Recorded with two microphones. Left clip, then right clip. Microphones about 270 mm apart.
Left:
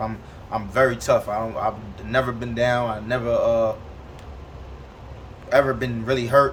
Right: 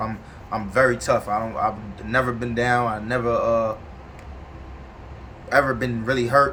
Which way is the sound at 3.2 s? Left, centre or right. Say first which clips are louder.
Left 1 dB; centre.